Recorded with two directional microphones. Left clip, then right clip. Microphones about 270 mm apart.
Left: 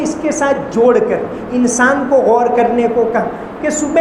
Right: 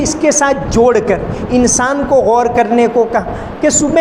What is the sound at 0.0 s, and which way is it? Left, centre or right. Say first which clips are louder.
A woman's voice: right 4 dB; right.